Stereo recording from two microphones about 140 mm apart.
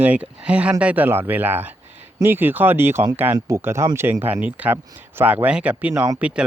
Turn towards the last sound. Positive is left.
turn(degrees=-10)  # may be behind; listen again after turning